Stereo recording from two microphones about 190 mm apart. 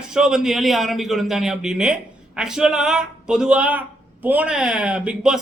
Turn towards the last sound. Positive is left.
turn(degrees=-5)  # may be behind; listen again after turning